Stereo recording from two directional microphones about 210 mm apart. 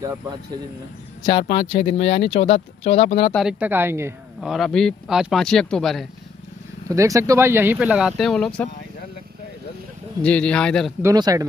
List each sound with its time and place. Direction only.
0.0 s speech: 15° right (ahead or behind)
1.4 s speech: 25° left (ahead or behind)
3.3 s speech: 5° right (ahead or behind)
4.5 s speech: centre (ahead or behind)
6.9 s speech: 15° right (ahead or behind); by 8.6 s 5° left (ahead or behind)
10.2 s speech: 5° left (ahead or behind)
11.0 s speech: 15° right (ahead or behind)